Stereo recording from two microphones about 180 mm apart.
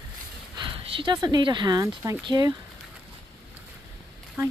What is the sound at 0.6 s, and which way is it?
Speech, 30° right (ahead or behind).